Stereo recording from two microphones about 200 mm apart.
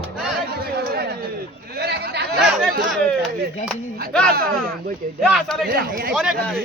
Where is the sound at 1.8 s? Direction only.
55° right (ahead or behind).